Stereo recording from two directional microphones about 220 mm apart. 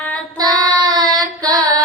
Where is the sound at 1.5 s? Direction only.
15° right (ahead or behind).